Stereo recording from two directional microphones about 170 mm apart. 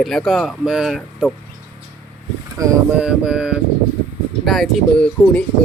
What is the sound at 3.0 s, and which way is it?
Speech, 5° right (ahead or behind).